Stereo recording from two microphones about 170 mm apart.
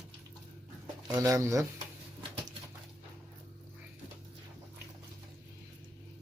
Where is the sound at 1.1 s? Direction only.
15° right (ahead or behind).